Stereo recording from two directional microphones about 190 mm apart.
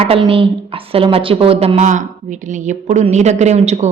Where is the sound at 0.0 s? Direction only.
30° right (ahead or behind).